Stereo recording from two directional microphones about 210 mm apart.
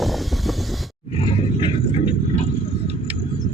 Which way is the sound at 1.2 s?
25° left (ahead or behind).